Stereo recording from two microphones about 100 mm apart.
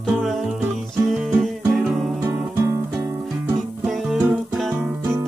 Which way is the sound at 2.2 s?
25° right (ahead or behind).